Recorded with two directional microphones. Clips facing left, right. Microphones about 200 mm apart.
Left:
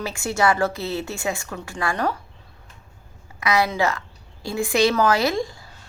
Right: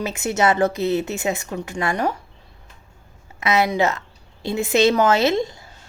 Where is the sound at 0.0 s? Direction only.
20° right (ahead or behind).